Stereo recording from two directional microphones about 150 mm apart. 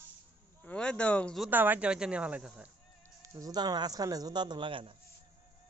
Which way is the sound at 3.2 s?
25° right (ahead or behind).